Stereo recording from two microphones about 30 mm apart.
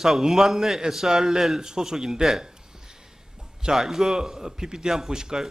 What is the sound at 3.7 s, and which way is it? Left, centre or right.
A man's voice, centre.